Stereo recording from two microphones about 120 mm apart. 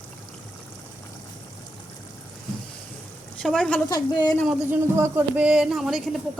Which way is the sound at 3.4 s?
5° left (ahead or behind).